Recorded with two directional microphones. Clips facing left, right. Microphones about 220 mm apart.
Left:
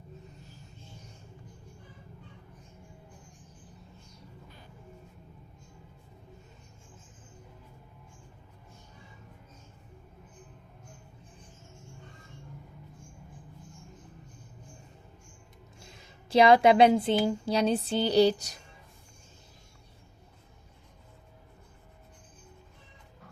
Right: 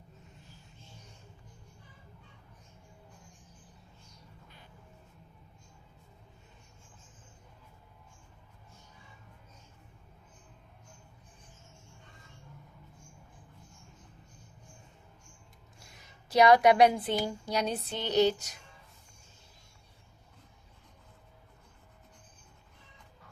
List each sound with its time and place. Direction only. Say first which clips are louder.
15.8 s a woman's voice: left 5 dB; 25° left (ahead or behind)
17.2 s music: left 6 dB; 30° left (ahead or behind)